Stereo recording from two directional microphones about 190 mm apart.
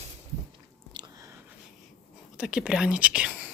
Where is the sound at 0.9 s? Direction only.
25° right (ahead or behind).